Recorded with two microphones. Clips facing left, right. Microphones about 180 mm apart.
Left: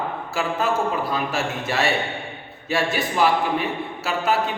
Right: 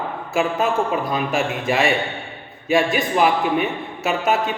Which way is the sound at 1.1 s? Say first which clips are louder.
Right 3 dB; 15° right (ahead or behind).